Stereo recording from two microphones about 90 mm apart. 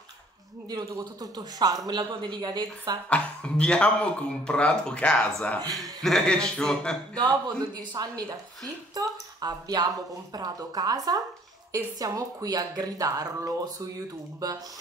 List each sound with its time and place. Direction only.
0.7 s speech: 45° right (ahead or behind)
3.1 s speech: 10° left (ahead or behind)
7.2 s speech: 55° right (ahead or behind)